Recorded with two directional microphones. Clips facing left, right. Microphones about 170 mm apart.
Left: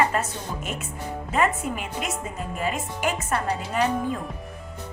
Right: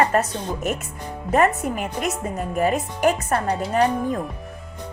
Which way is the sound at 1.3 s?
45° right (ahead or behind).